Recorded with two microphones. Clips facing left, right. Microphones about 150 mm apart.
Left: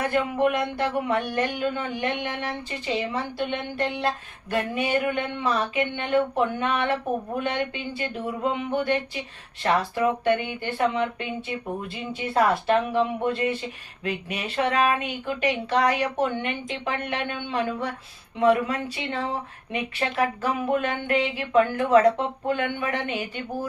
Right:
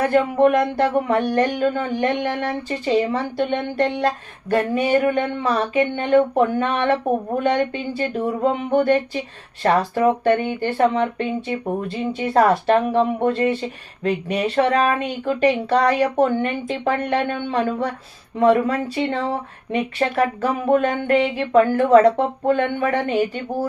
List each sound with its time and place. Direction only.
0.1 s speech: 40° right (ahead or behind)